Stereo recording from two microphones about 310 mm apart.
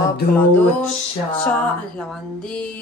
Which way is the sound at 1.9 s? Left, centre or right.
Centre.